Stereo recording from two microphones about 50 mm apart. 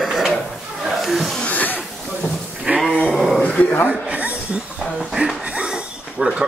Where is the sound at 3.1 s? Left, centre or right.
Centre.